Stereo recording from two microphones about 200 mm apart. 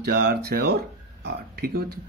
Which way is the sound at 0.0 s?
50° right (ahead or behind).